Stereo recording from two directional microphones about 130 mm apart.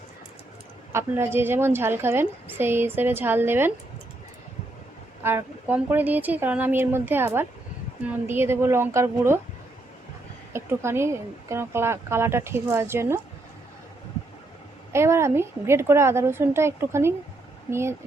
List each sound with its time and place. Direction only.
0.9 s a woman's voice: 15° right (ahead or behind)
5.2 s a woman's voice: 15° right (ahead or behind)
10.5 s speech: 20° right (ahead or behind)
14.9 s speech: 20° right (ahead or behind)